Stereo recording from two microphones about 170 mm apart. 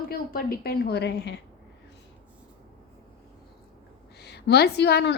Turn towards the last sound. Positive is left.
turn(degrees=75)  # may be behind; listen again after turning